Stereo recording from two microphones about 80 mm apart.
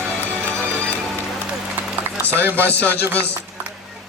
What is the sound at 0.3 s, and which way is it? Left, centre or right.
Music, centre.